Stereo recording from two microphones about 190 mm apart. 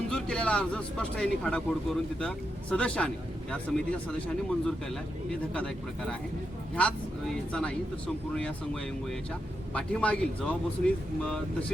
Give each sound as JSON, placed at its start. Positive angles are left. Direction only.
{"t": 0.1, "sound": "speech", "side_deg": 5}